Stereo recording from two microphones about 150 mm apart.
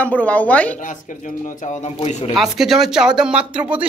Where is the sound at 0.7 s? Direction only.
60° left (ahead or behind).